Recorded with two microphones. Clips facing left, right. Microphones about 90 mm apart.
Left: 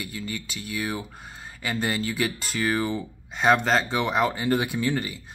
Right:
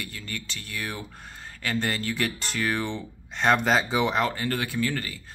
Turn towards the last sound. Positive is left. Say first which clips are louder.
# left 2 dB
turn(degrees=15)  # may be behind; listen again after turning